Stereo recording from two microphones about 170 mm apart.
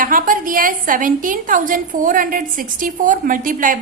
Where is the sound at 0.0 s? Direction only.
55° right (ahead or behind).